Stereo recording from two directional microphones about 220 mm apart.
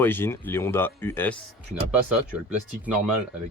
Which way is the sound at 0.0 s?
10° left (ahead or behind).